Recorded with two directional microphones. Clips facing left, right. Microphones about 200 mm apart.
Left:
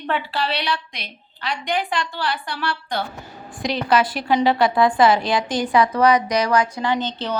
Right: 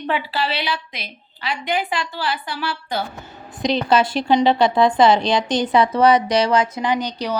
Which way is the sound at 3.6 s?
20° right (ahead or behind).